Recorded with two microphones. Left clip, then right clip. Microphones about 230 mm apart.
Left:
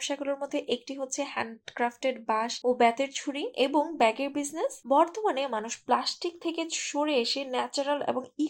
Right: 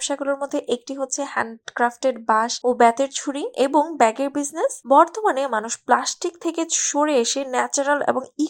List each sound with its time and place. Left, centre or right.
0.1 s speech: right